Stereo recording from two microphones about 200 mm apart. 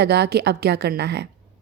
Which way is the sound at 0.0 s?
55° right (ahead or behind).